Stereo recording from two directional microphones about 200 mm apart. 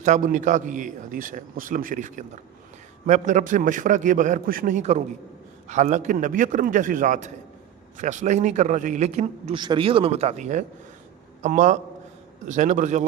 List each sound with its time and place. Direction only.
0.0 s a man's voice: 40° right (ahead or behind)